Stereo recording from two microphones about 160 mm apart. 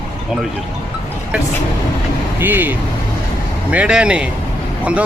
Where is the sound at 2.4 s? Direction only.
10° right (ahead or behind).